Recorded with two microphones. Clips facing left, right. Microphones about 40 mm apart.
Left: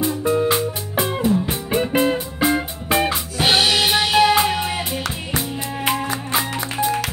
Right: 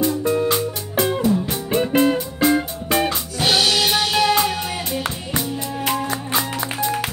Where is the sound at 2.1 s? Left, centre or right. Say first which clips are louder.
Right 2 dB; left.